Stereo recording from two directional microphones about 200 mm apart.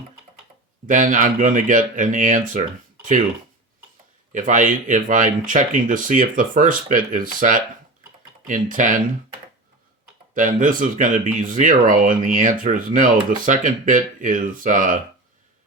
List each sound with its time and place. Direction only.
0.9 s speech: 40° right (ahead or behind)
4.3 s speech: 40° right (ahead or behind)
10.3 s speech: 40° right (ahead or behind)